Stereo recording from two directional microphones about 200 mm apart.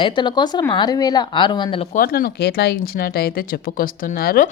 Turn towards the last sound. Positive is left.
turn(degrees=45)  # may be behind; listen again after turning